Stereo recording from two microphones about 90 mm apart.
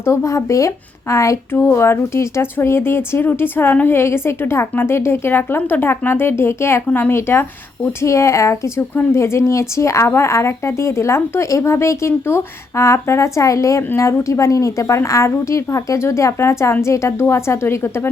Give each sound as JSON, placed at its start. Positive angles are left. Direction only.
{"t": 0.0, "sound": "speech", "side_deg": 35}